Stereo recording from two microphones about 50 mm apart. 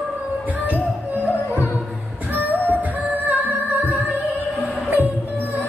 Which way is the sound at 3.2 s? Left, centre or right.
Right.